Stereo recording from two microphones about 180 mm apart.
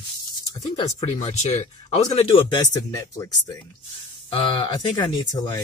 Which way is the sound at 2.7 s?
20° left (ahead or behind).